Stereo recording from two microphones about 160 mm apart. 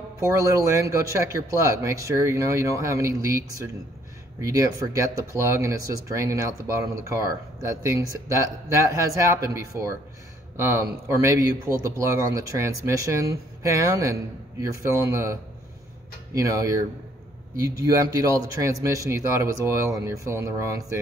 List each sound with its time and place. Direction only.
0.2 s a man's voice: 20° right (ahead or behind)
7.6 s a man's voice: 20° right (ahead or behind)
11.1 s a man's voice: 15° right (ahead or behind)
16.3 s a man's voice: 20° right (ahead or behind)